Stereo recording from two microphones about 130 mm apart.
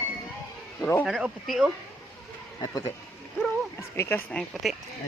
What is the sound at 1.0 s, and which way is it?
Speech, 5° right (ahead or behind).